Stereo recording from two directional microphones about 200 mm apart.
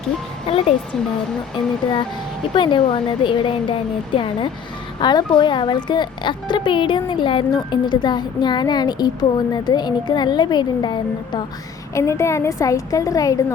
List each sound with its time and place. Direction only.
0.4 s a woman's voice: 30° left (ahead or behind)